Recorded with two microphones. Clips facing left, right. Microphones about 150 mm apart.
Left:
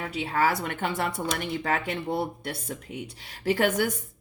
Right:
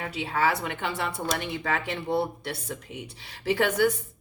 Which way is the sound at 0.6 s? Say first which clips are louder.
Left 2 dB; 50° left (ahead or behind).